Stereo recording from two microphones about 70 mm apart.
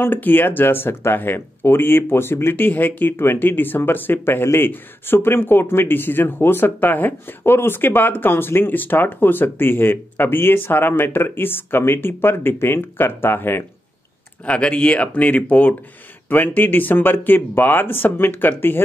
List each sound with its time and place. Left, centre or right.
0.0 s speech: left
14.4 s speech: centre